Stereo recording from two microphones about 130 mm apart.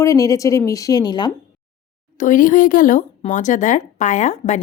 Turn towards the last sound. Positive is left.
turn(degrees=65)  # may be behind; listen again after turning